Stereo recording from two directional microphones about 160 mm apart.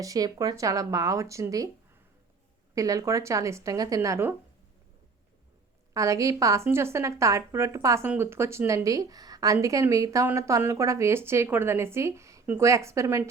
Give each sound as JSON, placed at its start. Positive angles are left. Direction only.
{"t": 0.0, "sound": "a woman's voice", "side_deg": -20}
{"t": 2.7, "sound": "a woman's voice", "side_deg": -20}
{"t": 5.9, "sound": "a woman's voice", "side_deg": -20}